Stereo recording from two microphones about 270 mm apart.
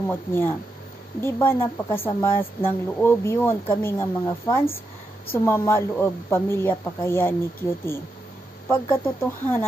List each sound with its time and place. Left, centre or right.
0.1 s a woman's voice: centre